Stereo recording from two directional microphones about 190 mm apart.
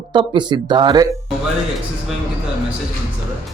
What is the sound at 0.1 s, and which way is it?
Speech, 25° right (ahead or behind).